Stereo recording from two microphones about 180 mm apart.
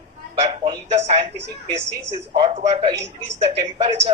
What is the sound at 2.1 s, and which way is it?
A man's voice, 35° right (ahead or behind).